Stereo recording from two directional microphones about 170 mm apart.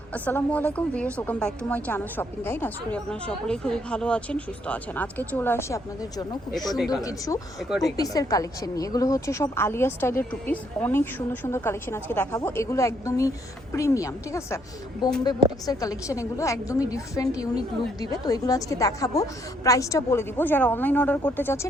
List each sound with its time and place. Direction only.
0.1 s a woman's voice: 10° left (ahead or behind)
6.7 s a woman's voice: centre (ahead or behind)
7.0 s a woman's voice: 20° left (ahead or behind)
7.7 s a woman's voice: centre (ahead or behind)
7.9 s a woman's voice: 20° left (ahead or behind)
15.6 s a woman's voice: 20° left (ahead or behind)